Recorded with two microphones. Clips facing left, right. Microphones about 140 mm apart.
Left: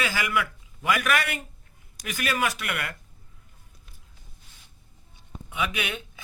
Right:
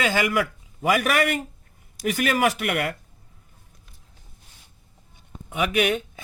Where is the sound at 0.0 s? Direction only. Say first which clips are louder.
Right 5 dB; 40° right (ahead or behind); by 2.9 s 55° right (ahead or behind).